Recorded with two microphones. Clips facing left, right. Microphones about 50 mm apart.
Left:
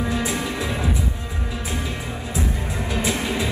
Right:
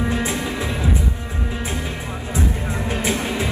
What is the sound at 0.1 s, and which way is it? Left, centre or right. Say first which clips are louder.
Music: right 1 dB; right.